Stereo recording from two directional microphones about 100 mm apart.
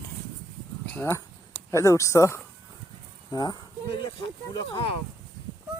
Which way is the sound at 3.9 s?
55° left (ahead or behind).